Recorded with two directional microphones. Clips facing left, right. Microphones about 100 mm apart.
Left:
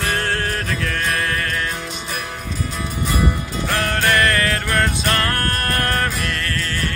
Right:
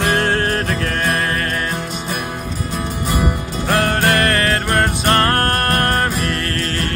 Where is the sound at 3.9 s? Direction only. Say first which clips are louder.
Right 2 dB; 55° right (ahead or behind).